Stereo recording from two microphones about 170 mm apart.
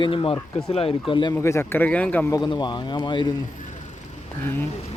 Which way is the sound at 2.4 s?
25° left (ahead or behind).